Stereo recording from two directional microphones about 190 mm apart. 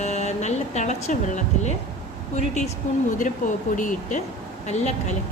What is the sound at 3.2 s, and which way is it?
Speech, 45° left (ahead or behind).